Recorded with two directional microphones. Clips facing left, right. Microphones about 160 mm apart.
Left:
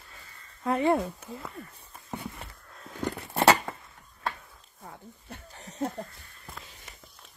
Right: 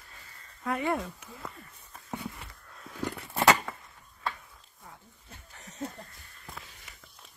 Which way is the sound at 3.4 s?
30° left (ahead or behind).